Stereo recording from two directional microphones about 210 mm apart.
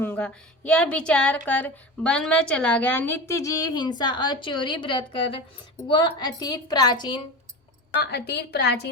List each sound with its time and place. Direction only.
0.0 s a woman's voice: 10° left (ahead or behind)
8.0 s a woman's voice: 50° left (ahead or behind)